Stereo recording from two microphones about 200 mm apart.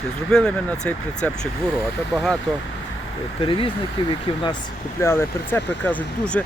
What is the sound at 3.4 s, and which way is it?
Speech, 25° left (ahead or behind).